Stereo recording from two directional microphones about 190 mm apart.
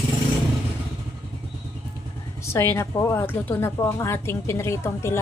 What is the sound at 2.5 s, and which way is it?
A woman's voice, 15° left (ahead or behind).